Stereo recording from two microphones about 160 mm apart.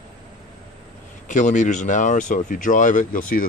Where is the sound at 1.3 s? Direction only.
50° left (ahead or behind).